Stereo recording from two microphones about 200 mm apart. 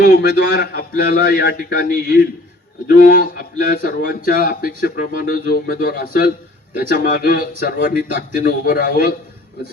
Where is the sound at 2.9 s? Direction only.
45° left (ahead or behind).